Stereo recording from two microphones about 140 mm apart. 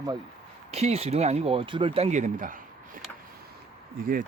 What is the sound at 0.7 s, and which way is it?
Speech, 50° right (ahead or behind).